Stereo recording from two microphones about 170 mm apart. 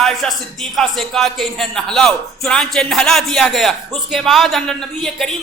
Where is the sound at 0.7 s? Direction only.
Centre (ahead or behind).